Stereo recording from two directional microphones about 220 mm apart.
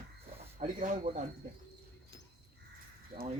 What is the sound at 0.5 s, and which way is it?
Speech, 35° right (ahead or behind).